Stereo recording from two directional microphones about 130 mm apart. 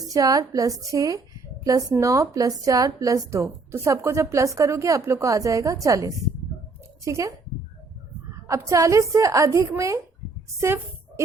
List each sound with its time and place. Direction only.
0.1 s speech: 25° right (ahead or behind)
8.4 s speech: 25° right (ahead or behind)